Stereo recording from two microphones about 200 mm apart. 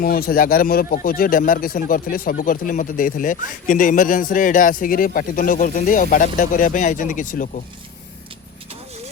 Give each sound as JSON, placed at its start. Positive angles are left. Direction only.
{"t": 0.0, "sound": "speech", "side_deg": 45}